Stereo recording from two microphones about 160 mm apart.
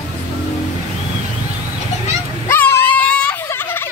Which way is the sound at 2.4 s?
15° left (ahead or behind).